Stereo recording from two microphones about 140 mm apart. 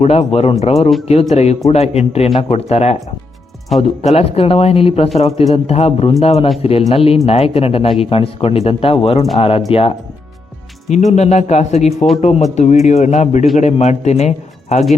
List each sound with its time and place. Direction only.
0.0 s speech: 50° left (ahead or behind)
10.9 s speech: 55° left (ahead or behind)